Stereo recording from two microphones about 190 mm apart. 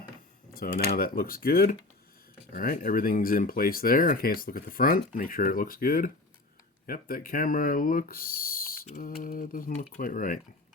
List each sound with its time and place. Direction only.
0.5 s speech: 50° left (ahead or behind)